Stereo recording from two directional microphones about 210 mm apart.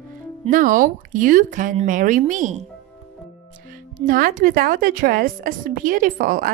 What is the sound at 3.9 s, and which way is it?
Speech, 40° right (ahead or behind).